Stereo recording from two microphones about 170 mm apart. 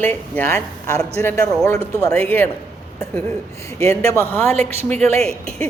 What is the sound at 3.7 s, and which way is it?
Speech, 15° left (ahead or behind).